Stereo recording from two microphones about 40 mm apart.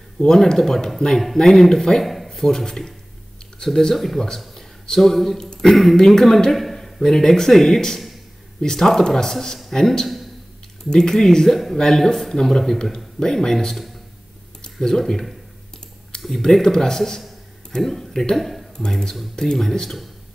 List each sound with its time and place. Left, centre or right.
0.5 s speech: centre
4.6 s a sound: centre
5.4 s speech: centre
5.7 s speech: centre
16.3 s speech: centre
18.8 s speech: centre